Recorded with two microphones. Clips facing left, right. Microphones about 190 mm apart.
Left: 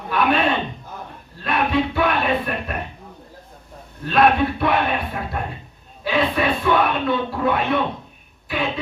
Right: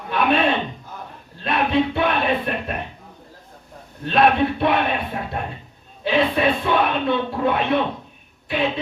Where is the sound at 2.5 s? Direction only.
25° right (ahead or behind).